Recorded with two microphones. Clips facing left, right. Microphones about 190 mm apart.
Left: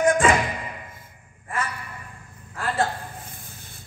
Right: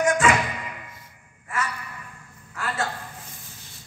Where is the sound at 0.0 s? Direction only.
30° left (ahead or behind).